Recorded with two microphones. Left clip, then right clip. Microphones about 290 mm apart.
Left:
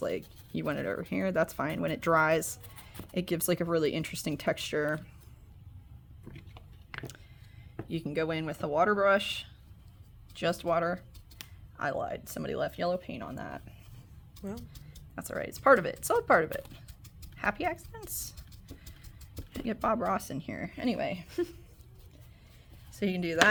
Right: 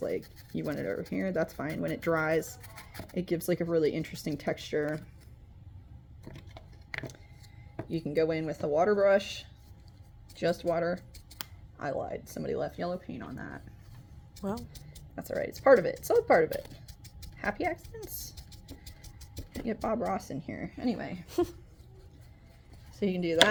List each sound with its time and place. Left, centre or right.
0.0 s speech: left
7.9 s speech: left
14.4 s speech: centre
15.1 s speech: centre
19.6 s speech: left
23.0 s speech: left